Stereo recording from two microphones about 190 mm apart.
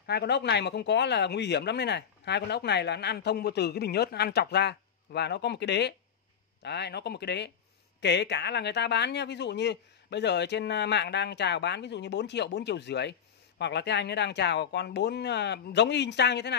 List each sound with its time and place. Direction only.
0.0 s speech: 60° left (ahead or behind)